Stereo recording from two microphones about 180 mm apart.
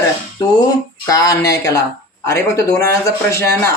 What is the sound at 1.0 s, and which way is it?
Speech, 20° left (ahead or behind).